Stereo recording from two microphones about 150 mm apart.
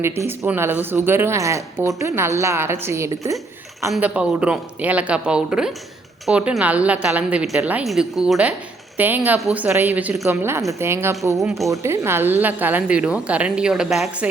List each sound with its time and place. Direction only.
0.0 s a woman's voice: 15° right (ahead or behind)
3.9 s a woman's voice: 5° right (ahead or behind)
11.3 s speech: centre (ahead or behind)
11.7 s a woman's voice: 20° right (ahead or behind)